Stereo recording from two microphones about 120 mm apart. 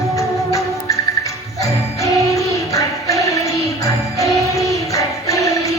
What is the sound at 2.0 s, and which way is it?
Music, 25° left (ahead or behind).